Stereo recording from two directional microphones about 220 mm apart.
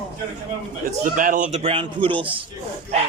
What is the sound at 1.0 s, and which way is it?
A man's voice, 35° right (ahead or behind).